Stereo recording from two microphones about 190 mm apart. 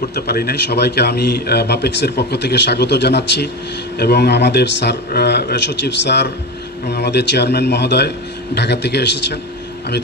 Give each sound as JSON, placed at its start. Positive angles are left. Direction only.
{"t": 0.1, "sound": "a man's voice", "side_deg": 55}
{"t": 6.9, "sound": "a man's voice", "side_deg": 60}